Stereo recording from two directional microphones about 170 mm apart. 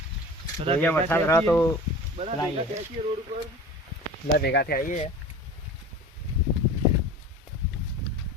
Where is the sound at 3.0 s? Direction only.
35° right (ahead or behind).